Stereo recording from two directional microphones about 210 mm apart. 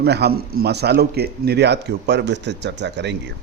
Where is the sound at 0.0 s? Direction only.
50° right (ahead or behind).